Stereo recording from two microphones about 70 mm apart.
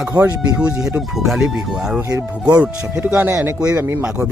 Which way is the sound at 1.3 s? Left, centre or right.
Centre.